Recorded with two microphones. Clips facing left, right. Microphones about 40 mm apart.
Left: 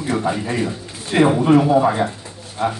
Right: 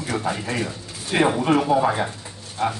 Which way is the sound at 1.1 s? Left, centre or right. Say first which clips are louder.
Left 5 dB; centre.